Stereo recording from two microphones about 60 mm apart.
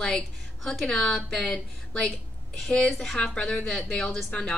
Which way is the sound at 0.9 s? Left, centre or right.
Centre.